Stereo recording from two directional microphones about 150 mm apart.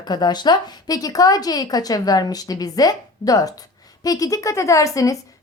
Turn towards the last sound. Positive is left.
turn(degrees=20)  # may be behind; listen again after turning